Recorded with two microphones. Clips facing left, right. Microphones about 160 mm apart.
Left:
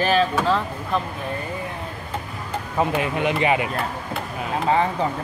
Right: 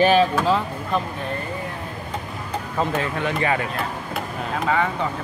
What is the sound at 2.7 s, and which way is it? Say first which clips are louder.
Speech: left 2 dB; 15° left (ahead or behind).